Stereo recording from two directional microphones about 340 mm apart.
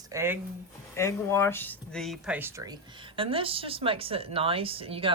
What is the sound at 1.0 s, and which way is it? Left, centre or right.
A woman's voice, centre.